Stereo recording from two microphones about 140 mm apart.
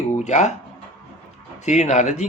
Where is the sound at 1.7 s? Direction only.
55° left (ahead or behind).